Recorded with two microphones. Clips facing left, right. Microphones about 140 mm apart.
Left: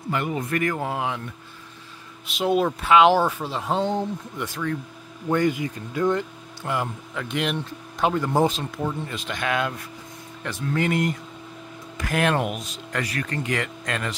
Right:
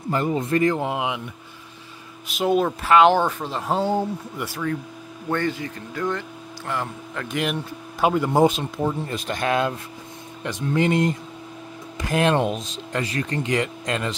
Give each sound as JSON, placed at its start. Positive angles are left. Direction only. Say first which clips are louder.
{"t": 0.1, "sound": "speech", "louder": "right 4 dB", "side_deg": -30}
{"t": 2.2, "sound": "speech", "louder": "right 1 dB", "side_deg": 0}
{"t": 5.3, "sound": "speech", "louder": "left 3 dB", "side_deg": 15}
{"t": 7.2, "sound": "speech", "louder": "right 1 dB", "side_deg": 0}
{"t": 9.1, "sound": "speech", "louder": "right 3 dB", "side_deg": -35}
{"t": 10.4, "sound": "speech", "louder": "right 3 dB", "side_deg": -20}